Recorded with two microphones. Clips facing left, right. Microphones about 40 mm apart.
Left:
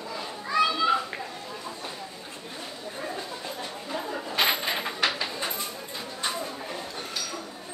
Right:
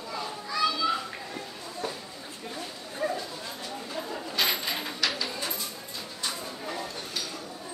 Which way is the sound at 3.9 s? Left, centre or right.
Left.